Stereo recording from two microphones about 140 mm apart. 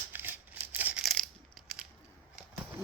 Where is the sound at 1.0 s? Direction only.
Centre (ahead or behind).